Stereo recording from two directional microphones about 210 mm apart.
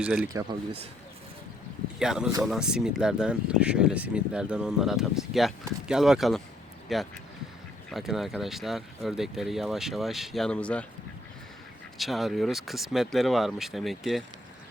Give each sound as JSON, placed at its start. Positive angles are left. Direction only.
{"t": 0.0, "sound": "speech", "side_deg": -5}
{"t": 0.3, "sound": "speech", "side_deg": -25}
{"t": 2.0, "sound": "speech", "side_deg": -5}
{"t": 11.9, "sound": "speech", "side_deg": 0}